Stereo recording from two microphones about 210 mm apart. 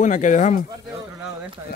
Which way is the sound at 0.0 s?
35° left (ahead or behind).